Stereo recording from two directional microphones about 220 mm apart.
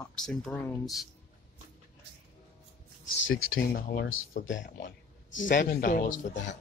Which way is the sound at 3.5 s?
45° left (ahead or behind).